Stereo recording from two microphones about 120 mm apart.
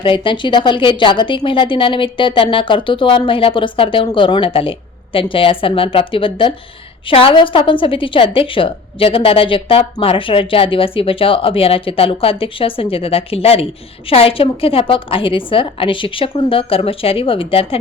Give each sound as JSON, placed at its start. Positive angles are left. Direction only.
{"t": 0.0, "sound": "a woman's voice", "side_deg": 45}